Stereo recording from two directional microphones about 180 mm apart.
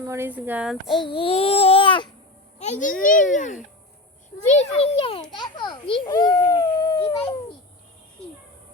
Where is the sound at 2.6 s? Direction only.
40° left (ahead or behind); by 7.1 s 20° left (ahead or behind).